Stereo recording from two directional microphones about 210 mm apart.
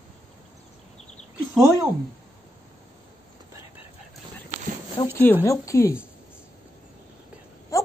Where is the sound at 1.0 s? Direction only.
30° left (ahead or behind).